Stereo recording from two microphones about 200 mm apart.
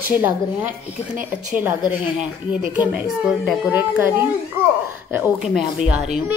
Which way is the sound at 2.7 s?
5° right (ahead or behind).